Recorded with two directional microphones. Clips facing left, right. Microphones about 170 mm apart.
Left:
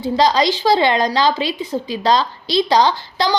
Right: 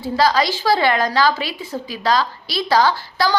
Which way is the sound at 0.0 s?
20° left (ahead or behind).